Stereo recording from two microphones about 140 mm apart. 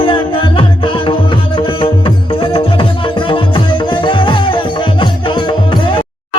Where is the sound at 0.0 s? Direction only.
40° left (ahead or behind).